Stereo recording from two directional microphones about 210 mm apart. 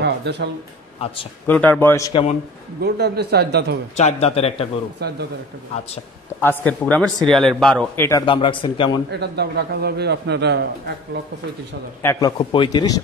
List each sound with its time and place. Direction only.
0.0 s speech: 55° right (ahead or behind)
1.5 s speech: 10° left (ahead or behind)
2.8 s a man's voice: 50° right (ahead or behind)
3.9 s a man's voice: 30° left (ahead or behind)
6.4 s speech: 10° left (ahead or behind)
9.2 s a man's voice: 50° right (ahead or behind)
12.0 s a man's voice: 15° left (ahead or behind)